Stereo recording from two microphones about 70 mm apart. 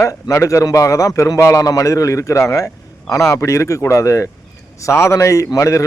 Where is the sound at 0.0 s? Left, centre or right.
Left.